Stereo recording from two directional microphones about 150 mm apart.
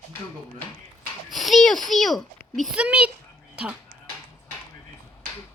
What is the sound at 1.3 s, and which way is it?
A child's voice, centre (ahead or behind).